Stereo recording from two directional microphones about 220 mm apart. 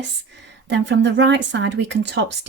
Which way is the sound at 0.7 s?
55° right (ahead or behind).